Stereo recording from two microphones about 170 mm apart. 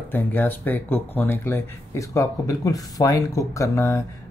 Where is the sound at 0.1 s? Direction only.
10° left (ahead or behind).